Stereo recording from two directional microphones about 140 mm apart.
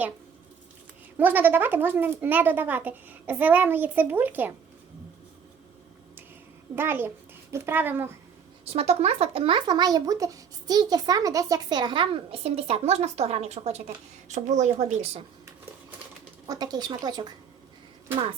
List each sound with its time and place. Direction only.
1.1 s a child's voice: 15° right (ahead or behind)
6.7 s a child's voice: 15° right (ahead or behind)
8.7 s speech: 50° right (ahead or behind)
16.5 s speech: 30° right (ahead or behind)